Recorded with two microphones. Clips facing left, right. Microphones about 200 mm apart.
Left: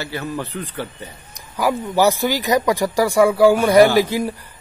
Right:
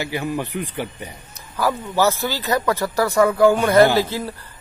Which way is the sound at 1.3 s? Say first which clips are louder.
Left 2 dB; 15° left (ahead or behind).